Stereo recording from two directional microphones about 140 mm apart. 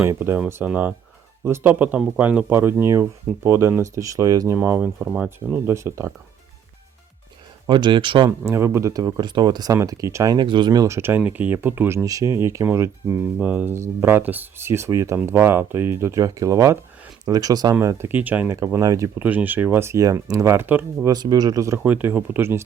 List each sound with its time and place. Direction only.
0.0 s speech: 15° right (ahead or behind)
4.5 s speech: 15° right (ahead or behind)
7.7 s speech: 35° right (ahead or behind)
8.4 s speech: 20° right (ahead or behind)
17.7 s speech: 20° right (ahead or behind)
19.2 s speech: 10° right (ahead or behind)
21.1 s speech: 30° right (ahead or behind)
21.8 s speech: 15° right (ahead or behind)